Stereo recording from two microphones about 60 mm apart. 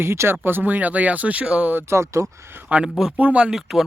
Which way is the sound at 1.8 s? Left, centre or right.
Right.